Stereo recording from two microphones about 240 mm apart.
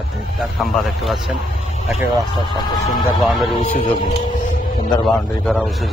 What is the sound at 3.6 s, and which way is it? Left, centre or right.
Speech, left.